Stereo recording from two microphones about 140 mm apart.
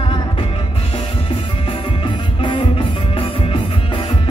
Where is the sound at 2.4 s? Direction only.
35° left (ahead or behind).